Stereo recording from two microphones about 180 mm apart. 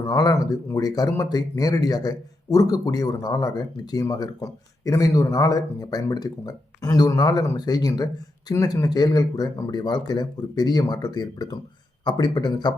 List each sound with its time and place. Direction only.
0.0 s speech: 20° left (ahead or behind)